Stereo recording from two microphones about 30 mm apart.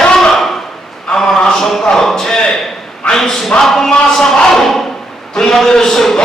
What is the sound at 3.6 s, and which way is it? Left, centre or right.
Speech, centre.